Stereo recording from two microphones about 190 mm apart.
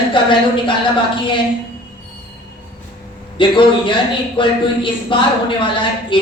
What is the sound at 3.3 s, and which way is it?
Speech, 25° left (ahead or behind).